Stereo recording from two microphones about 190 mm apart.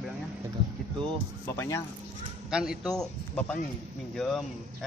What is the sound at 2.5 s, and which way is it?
Speech, 5° right (ahead or behind).